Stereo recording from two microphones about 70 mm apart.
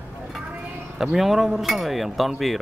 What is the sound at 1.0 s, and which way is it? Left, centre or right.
Speech, centre.